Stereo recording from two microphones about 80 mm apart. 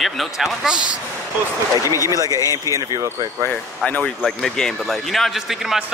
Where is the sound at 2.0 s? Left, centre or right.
Left.